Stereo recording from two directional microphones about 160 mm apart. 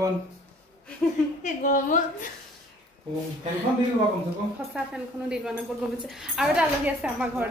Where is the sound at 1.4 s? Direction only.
55° left (ahead or behind).